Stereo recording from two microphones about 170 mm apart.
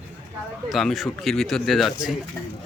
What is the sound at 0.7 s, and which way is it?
Speech, centre (ahead or behind).